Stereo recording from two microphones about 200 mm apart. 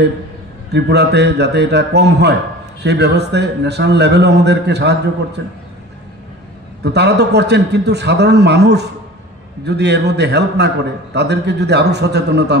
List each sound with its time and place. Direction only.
0.7 s a man's voice: 60° right (ahead or behind)
6.8 s a man's voice: 55° right (ahead or behind)